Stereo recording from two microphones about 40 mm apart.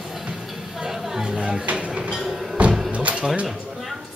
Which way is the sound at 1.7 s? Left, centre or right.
Right.